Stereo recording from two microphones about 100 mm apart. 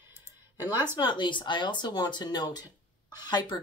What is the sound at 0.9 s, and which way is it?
Speech, 50° left (ahead or behind).